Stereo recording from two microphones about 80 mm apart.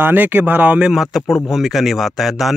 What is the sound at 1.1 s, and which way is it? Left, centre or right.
A man's voice, centre.